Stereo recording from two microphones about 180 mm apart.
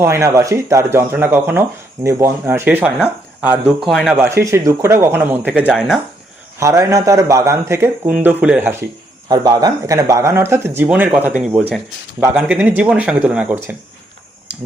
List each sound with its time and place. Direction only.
0.0 s speech: 15° right (ahead or behind)
4.2 s speech: 15° right (ahead or behind)
6.6 s speech: 15° right (ahead or behind)
9.3 s speech: 20° right (ahead or behind)